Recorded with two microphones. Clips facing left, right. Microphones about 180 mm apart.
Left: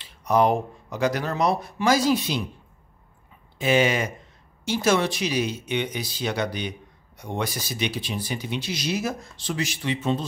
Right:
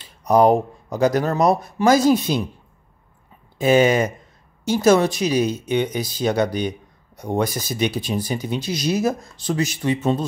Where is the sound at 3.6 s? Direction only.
40° right (ahead or behind).